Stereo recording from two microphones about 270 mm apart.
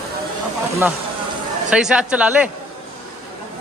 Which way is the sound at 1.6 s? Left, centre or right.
Centre.